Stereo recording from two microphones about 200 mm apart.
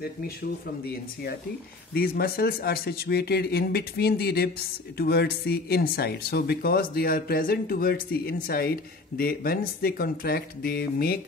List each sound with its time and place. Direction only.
2.0 s speech: 50° left (ahead or behind)